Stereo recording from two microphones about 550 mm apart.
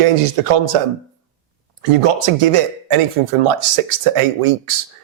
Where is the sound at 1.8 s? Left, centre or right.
Right.